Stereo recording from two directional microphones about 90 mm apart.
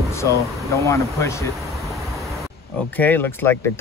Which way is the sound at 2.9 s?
20° left (ahead or behind).